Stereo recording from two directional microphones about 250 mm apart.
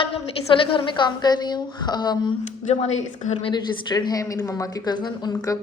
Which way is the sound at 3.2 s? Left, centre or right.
Centre.